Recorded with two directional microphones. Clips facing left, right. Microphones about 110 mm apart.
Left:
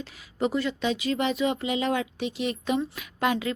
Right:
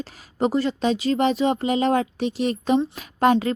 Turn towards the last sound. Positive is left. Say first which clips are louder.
# right 8 dB
turn(degrees=-40)  # may be behind; listen again after turning